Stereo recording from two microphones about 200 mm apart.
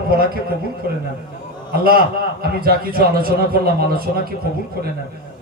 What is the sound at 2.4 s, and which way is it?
A man's voice, 50° right (ahead or behind).